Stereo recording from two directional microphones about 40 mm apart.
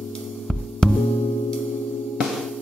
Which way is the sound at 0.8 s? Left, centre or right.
Centre.